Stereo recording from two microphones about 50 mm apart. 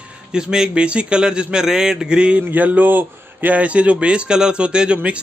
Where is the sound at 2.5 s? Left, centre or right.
Right.